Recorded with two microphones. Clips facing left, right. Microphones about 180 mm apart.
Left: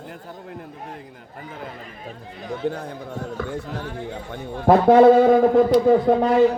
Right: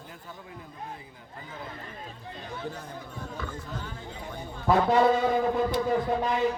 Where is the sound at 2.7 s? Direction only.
65° left (ahead or behind).